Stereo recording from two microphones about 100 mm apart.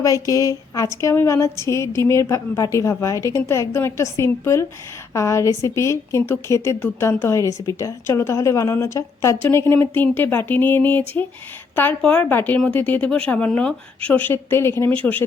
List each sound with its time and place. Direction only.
0.0 s a woman's voice: 35° left (ahead or behind); by 15.2 s 15° left (ahead or behind)